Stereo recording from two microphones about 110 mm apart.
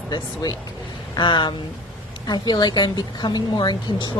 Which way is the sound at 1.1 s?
45° left (ahead or behind).